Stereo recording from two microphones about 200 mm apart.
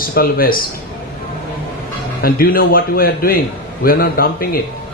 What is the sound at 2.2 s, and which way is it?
Speech, 45° left (ahead or behind).